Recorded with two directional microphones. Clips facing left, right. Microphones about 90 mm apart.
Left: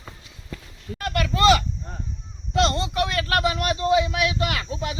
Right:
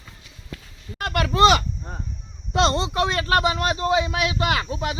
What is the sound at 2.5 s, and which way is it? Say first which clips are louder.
Speech: right 1 dB; 25° right (ahead or behind).